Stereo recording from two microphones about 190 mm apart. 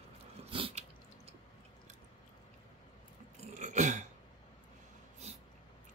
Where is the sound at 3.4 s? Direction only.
40° right (ahead or behind).